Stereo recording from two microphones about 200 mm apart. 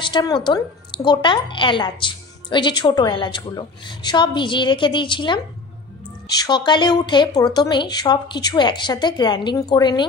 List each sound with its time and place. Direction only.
0.0 s a woman's voice: 20° left (ahead or behind)